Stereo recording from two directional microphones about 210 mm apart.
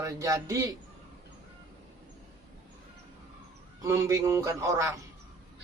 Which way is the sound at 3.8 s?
15° right (ahead or behind).